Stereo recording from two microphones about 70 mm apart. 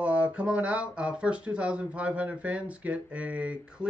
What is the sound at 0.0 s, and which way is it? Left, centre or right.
Speech, centre.